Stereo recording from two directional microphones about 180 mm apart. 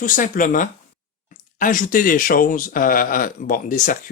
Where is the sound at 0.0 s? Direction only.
50° left (ahead or behind).